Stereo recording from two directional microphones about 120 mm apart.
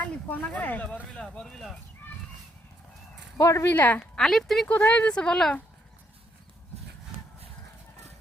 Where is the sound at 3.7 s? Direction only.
15° left (ahead or behind).